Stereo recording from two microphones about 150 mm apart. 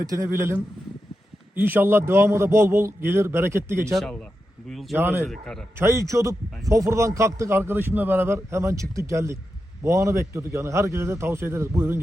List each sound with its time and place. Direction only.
0.0 s a man's voice: 20° right (ahead or behind)
3.9 s speech: 5° left (ahead or behind)
4.9 s a man's voice: 15° right (ahead or behind)
5.3 s speech: 5° left (ahead or behind)
5.7 s a man's voice: 15° right (ahead or behind)